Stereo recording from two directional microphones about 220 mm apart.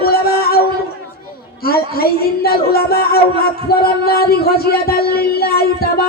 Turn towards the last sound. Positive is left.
turn(degrees=45)  # may be behind; listen again after turning